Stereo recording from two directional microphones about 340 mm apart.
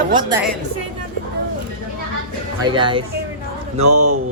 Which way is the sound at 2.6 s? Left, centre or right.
Centre.